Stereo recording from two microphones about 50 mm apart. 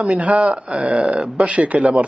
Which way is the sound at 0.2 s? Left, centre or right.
Right.